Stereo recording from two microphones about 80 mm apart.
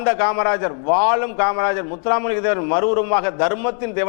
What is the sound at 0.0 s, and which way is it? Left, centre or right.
A man's voice, centre.